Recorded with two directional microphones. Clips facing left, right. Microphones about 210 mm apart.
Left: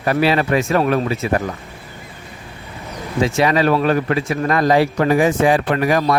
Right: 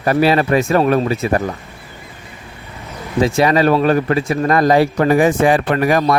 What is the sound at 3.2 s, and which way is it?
Speech, 35° right (ahead or behind).